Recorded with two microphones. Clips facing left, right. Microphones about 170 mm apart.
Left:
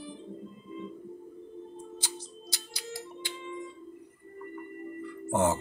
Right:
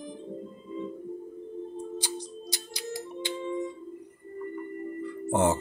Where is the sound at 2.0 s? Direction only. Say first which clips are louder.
Right 7 dB; 15° right (ahead or behind).